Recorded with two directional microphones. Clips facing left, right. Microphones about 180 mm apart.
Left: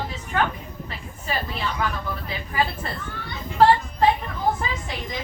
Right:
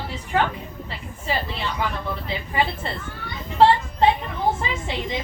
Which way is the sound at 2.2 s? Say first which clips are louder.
Right 1 dB; 25° right (ahead or behind).